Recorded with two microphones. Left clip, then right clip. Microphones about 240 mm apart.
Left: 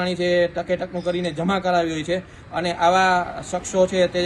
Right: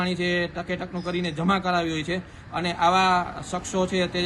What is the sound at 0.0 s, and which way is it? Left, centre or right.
A man's voice, right.